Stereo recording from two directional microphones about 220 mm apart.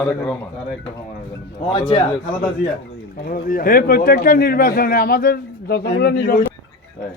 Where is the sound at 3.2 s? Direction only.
40° left (ahead or behind).